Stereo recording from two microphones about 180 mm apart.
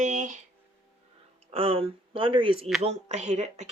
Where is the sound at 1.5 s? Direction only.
30° right (ahead or behind).